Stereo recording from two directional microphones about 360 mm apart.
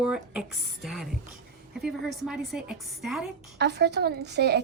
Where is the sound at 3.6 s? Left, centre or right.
Right.